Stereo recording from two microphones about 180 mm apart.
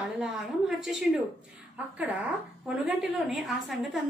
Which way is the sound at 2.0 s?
10° right (ahead or behind).